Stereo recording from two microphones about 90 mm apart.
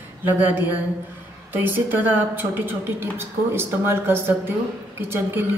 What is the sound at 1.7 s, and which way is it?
A woman's voice, 20° right (ahead or behind).